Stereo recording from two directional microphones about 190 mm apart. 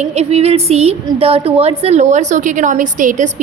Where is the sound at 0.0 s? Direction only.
35° right (ahead or behind).